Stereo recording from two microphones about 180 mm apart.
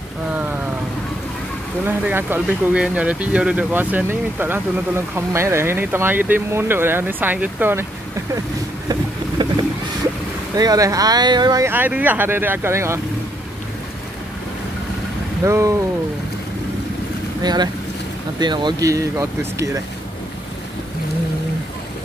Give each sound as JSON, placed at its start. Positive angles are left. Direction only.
{"t": 1.9, "sound": "speech", "side_deg": -10}
{"t": 10.5, "sound": "speech", "side_deg": -20}
{"t": 15.4, "sound": "speech", "side_deg": -15}
{"t": 17.4, "sound": "speech", "side_deg": -25}